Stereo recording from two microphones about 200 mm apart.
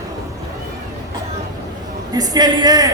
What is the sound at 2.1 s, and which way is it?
Speech, 20° right (ahead or behind).